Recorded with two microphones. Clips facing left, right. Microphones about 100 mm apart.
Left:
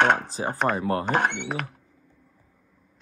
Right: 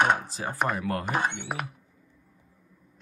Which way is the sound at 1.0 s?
65° left (ahead or behind).